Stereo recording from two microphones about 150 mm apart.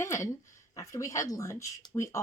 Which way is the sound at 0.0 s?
20° left (ahead or behind).